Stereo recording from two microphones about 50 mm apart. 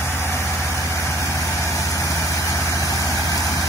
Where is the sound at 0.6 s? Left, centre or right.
Left.